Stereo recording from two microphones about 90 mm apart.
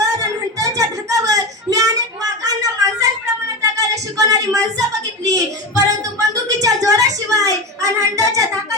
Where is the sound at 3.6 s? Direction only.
40° right (ahead or behind).